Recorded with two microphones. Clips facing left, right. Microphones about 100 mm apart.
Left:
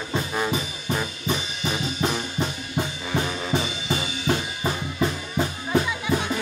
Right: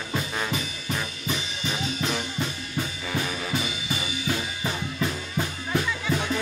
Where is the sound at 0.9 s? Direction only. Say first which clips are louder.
Left 4 dB; 30° left (ahead or behind).